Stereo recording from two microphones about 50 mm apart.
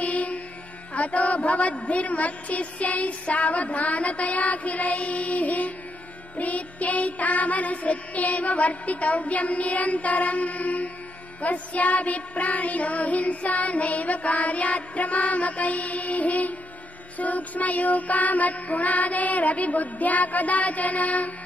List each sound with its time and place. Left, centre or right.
0.0 s music: left
0.9 s a woman's voice: left
6.3 s child singing: left